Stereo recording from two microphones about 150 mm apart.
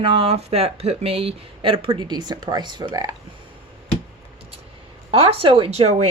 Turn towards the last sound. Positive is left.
turn(degrees=-45)  # may be behind; listen again after turning